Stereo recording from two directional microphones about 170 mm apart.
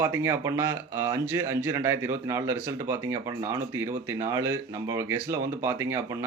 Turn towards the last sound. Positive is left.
turn(degrees=-15)  # may be behind; listen again after turning